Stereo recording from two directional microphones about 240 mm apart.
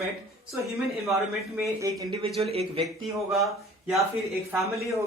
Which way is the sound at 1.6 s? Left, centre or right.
Centre.